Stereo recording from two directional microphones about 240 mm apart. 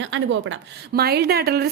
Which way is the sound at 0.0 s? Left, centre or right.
Right.